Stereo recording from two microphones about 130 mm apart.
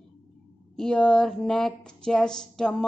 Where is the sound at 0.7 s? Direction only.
5° left (ahead or behind).